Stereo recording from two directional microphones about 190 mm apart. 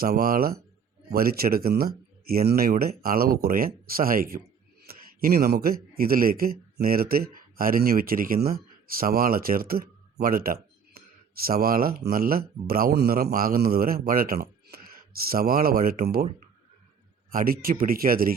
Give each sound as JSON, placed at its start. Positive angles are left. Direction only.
{"t": 0.0, "sound": "a man's voice", "side_deg": -50}
{"t": 17.3, "sound": "speech", "side_deg": -50}